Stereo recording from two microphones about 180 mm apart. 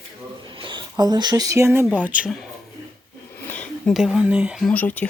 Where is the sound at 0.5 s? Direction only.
30° right (ahead or behind); by 2.5 s 5° right (ahead or behind).